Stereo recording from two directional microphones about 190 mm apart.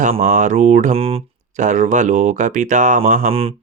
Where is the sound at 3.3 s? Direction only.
30° right (ahead or behind).